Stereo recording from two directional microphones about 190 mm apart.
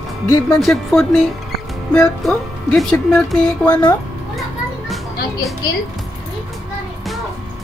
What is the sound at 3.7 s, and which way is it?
Speech, 20° left (ahead or behind).